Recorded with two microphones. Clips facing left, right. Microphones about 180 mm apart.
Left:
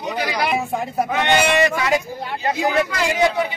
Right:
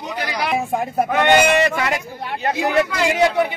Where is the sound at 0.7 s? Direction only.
50° right (ahead or behind).